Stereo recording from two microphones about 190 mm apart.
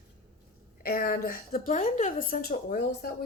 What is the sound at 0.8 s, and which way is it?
A woman's voice, 50° left (ahead or behind).